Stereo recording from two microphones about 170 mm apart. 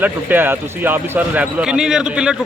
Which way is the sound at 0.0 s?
10° right (ahead or behind).